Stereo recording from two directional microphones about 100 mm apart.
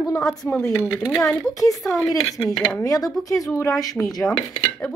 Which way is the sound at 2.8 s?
40° left (ahead or behind).